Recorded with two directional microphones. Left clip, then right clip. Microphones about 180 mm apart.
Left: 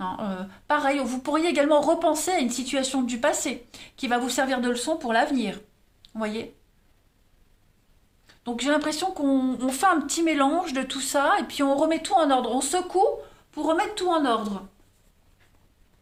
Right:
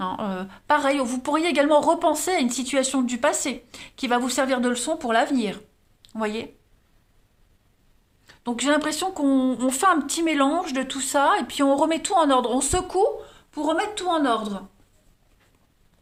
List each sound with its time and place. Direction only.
0.0 s speech: 40° right (ahead or behind)
8.3 s a woman's voice: 40° right (ahead or behind)